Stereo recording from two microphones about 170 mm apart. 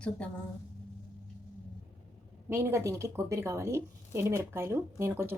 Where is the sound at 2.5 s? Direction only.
15° right (ahead or behind).